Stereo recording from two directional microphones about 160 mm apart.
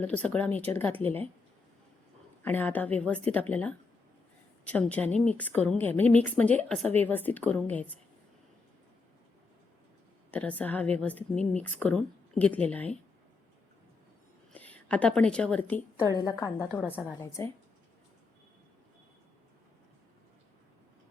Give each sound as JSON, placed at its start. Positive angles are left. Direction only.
{"t": 0.0, "sound": "a woman's voice", "side_deg": 10}
{"t": 2.4, "sound": "a woman's voice", "side_deg": 10}
{"t": 10.3, "sound": "a woman's voice", "side_deg": 10}
{"t": 14.5, "sound": "a woman's voice", "side_deg": 10}
{"t": 16.0, "sound": "a woman's voice", "side_deg": 25}